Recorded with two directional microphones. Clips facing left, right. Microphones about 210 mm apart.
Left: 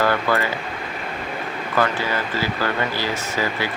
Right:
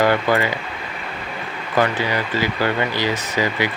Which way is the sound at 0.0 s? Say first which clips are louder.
Right 3 dB; 15° right (ahead or behind).